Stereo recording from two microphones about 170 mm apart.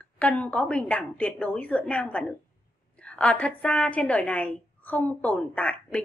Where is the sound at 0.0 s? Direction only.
10° left (ahead or behind).